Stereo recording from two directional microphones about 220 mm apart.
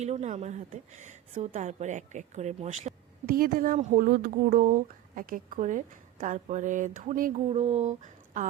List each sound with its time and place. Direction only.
0.0 s a woman's voice: 30° right (ahead or behind)